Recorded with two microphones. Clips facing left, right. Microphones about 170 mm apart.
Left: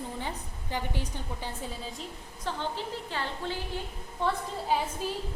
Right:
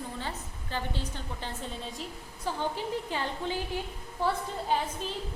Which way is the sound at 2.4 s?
10° right (ahead or behind).